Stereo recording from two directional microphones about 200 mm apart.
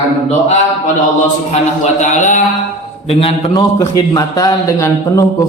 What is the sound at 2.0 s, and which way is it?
Speech, 40° left (ahead or behind).